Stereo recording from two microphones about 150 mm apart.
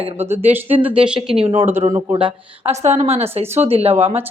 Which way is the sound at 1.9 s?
30° right (ahead or behind).